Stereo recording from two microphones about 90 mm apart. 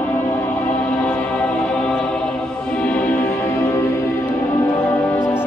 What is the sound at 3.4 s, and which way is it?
Music, 30° left (ahead or behind).